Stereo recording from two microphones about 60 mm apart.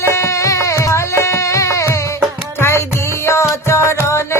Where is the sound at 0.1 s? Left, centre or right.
Left.